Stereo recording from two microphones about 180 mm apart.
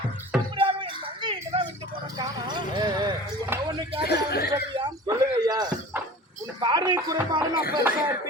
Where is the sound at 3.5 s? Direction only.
10° right (ahead or behind).